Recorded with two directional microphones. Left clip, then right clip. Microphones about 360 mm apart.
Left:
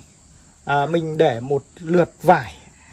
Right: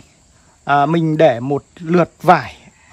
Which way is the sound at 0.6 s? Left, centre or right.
Centre.